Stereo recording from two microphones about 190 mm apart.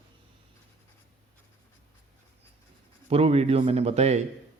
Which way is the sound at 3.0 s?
30° right (ahead or behind).